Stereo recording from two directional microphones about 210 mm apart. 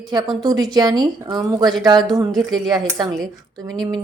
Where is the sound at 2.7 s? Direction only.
20° right (ahead or behind).